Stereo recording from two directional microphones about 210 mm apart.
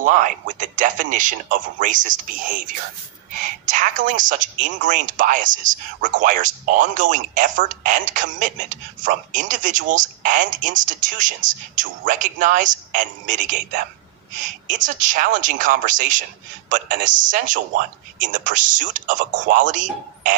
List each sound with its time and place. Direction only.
0.0 s speech: 40° right (ahead or behind)